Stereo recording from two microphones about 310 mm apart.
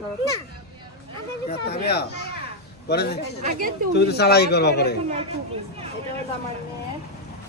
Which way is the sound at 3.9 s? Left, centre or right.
Left.